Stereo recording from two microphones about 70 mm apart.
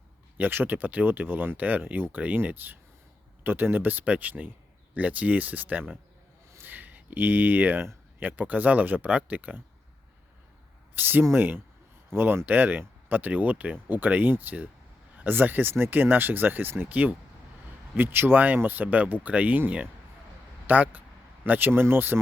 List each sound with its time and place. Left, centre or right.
0.3 s speech: right
6.6 s a sound: right
8.2 s speech: right
10.9 s speech: right